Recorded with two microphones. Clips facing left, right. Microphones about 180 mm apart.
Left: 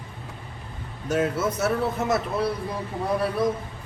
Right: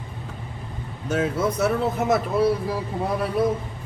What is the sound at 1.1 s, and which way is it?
Speech, 5° left (ahead or behind).